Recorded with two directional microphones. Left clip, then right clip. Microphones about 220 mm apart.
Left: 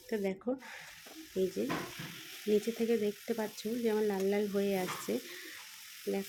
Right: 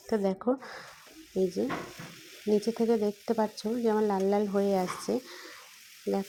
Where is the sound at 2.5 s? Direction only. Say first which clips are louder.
Right 3 dB; 20° right (ahead or behind).